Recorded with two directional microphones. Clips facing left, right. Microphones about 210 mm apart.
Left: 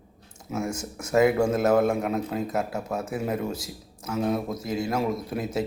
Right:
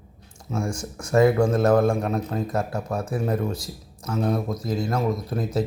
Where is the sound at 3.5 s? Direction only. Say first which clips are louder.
Right 1 dB; 25° left (ahead or behind).